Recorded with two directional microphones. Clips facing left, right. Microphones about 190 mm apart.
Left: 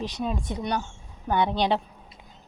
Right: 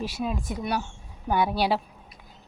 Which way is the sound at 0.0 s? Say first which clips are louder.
Even; 5° right (ahead or behind).